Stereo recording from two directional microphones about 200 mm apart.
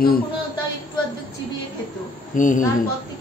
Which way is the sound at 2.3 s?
40° left (ahead or behind).